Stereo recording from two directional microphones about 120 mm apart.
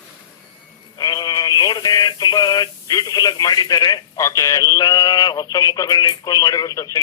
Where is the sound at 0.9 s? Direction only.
35° left (ahead or behind).